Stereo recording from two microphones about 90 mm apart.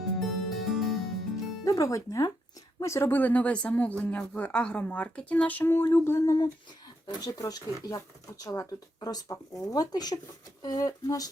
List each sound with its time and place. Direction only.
0.2 s music: centre (ahead or behind)
1.6 s speech: 40° left (ahead or behind)
3.1 s speech: 20° left (ahead or behind)
7.2 s speech: 40° left (ahead or behind)